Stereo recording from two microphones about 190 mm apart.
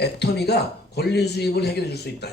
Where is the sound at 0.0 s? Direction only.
60° left (ahead or behind).